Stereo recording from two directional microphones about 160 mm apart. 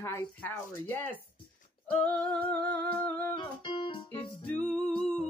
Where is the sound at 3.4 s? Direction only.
30° left (ahead or behind).